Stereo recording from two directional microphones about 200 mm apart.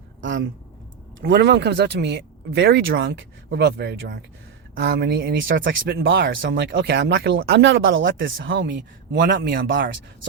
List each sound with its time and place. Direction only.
0.2 s a sound: 65° right (ahead or behind)
1.2 s speech: 60° right (ahead or behind)
5.6 s speech: 55° right (ahead or behind)